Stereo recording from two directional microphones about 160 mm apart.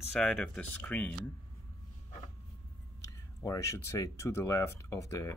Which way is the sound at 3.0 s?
20° left (ahead or behind).